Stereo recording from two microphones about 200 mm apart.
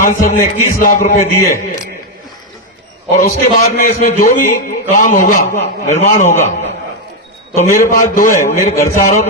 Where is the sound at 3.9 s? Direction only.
40° left (ahead or behind).